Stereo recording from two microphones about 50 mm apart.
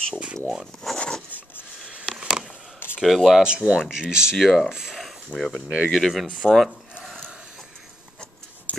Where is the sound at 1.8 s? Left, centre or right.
Centre.